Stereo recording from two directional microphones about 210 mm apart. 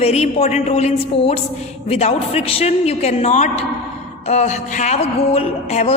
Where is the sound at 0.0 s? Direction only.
30° left (ahead or behind).